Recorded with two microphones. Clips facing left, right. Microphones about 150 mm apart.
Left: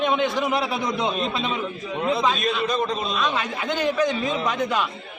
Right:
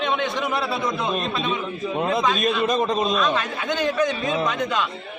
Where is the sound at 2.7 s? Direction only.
45° right (ahead or behind).